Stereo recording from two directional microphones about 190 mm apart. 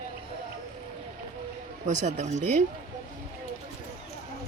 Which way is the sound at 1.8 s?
40° right (ahead or behind).